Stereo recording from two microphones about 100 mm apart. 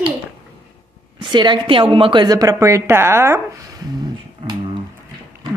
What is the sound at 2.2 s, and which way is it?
A woman's voice, 35° right (ahead or behind).